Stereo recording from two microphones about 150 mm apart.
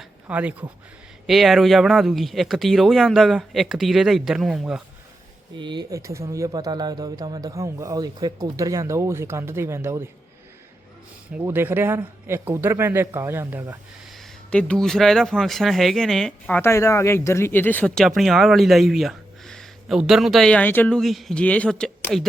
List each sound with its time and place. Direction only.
0.0 s a sound: 10° right (ahead or behind)
1.3 s speech: centre (ahead or behind)
5.5 s speech: 30° right (ahead or behind)
6.0 s a man's voice: 20° right (ahead or behind)
11.4 s speech: 15° right (ahead or behind)
14.1 s speech: 5° left (ahead or behind)
16.6 s speech: 15° left (ahead or behind)